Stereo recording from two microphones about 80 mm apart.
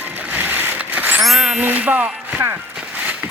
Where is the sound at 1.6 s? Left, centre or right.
Centre.